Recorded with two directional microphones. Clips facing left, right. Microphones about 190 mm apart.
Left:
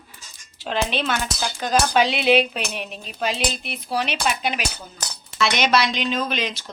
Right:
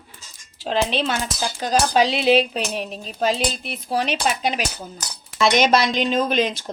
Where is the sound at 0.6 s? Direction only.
35° right (ahead or behind).